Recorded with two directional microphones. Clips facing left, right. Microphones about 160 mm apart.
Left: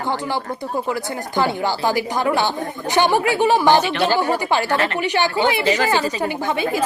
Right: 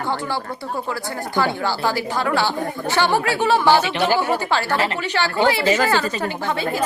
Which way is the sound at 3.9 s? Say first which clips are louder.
Even; 15° right (ahead or behind).